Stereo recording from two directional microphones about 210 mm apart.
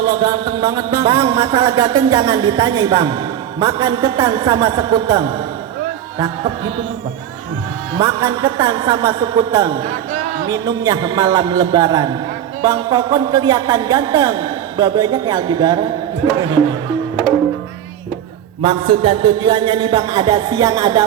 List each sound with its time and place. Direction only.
0.0 s music: 20° right (ahead or behind)
7.9 s music: 20° right (ahead or behind)
18.6 s music: 25° right (ahead or behind)